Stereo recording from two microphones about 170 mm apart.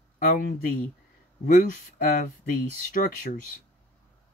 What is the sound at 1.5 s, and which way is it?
Speech, 55° left (ahead or behind).